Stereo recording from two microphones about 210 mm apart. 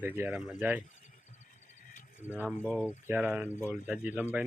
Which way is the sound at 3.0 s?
5° right (ahead or behind).